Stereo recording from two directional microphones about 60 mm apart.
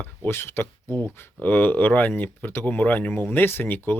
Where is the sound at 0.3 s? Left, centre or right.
Left.